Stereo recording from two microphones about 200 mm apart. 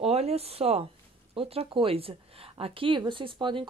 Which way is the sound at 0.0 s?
30° right (ahead or behind).